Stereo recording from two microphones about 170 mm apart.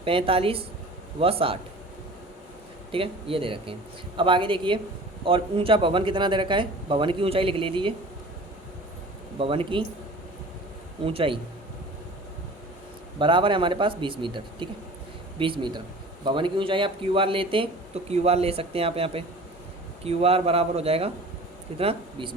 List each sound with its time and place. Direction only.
0.0 s speech: 35° right (ahead or behind)
2.9 s speech: 35° right (ahead or behind)
9.4 s speech: 30° right (ahead or behind)
11.0 s speech: 30° right (ahead or behind)
13.1 s speech: 30° right (ahead or behind)